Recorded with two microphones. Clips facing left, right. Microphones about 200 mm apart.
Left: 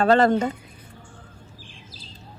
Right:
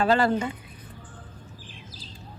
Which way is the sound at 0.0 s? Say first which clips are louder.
Left 4 dB; 40° left (ahead or behind).